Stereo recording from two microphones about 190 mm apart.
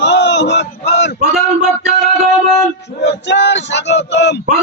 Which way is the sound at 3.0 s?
65° left (ahead or behind).